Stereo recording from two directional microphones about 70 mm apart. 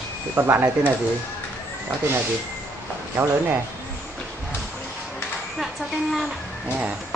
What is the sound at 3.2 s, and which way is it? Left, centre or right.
Speech, right.